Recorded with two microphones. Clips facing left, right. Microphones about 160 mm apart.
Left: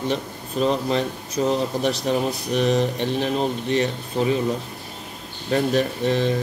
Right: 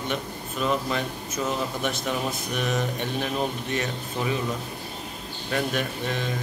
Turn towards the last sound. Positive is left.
turn(degrees=35)  # may be behind; listen again after turning